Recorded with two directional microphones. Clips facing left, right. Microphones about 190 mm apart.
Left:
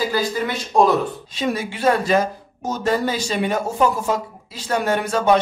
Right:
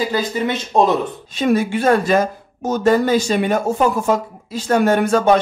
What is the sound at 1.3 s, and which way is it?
Speech, 50° right (ahead or behind).